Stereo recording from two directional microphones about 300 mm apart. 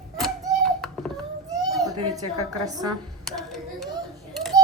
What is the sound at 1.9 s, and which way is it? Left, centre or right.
Speech, right.